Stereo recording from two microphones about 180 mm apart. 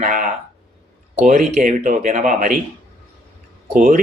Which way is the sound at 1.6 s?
45° right (ahead or behind).